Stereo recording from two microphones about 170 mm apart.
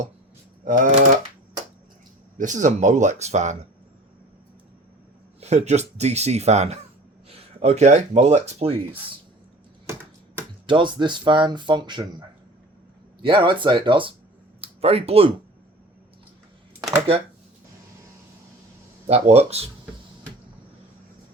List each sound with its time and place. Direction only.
0.6 s speech: 50° right (ahead or behind)
2.4 s speech: 45° right (ahead or behind)
5.4 s speech: 40° right (ahead or behind)
10.7 s speech: 30° right (ahead or behind)
13.2 s speech: 30° right (ahead or behind)
19.0 s speech: 35° right (ahead or behind)